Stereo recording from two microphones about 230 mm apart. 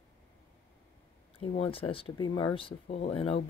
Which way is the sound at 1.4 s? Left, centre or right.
Left.